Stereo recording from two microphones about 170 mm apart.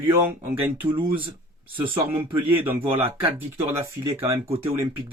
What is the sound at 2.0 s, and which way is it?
Speech, 10° right (ahead or behind).